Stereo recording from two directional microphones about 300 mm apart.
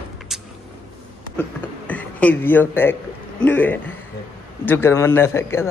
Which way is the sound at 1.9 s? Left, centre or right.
Centre.